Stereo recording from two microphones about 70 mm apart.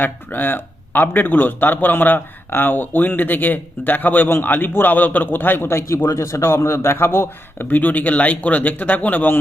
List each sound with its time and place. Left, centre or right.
0.0 s speech: left